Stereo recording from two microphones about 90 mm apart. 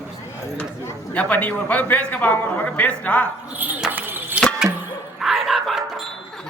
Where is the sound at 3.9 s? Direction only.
20° right (ahead or behind).